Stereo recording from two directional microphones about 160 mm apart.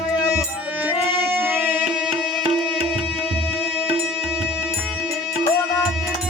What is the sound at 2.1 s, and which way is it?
Tabla, 35° right (ahead or behind).